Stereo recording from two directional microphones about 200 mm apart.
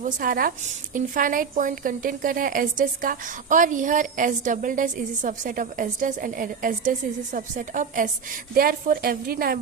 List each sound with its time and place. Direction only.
0.0 s a woman's voice: 45° right (ahead or behind)